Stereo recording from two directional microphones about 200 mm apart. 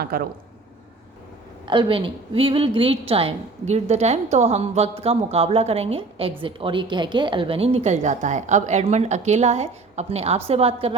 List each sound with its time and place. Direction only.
0.0 s speech: 50° right (ahead or behind)
1.6 s a woman's voice: 25° right (ahead or behind)